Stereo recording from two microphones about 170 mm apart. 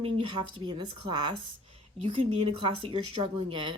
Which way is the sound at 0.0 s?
30° right (ahead or behind).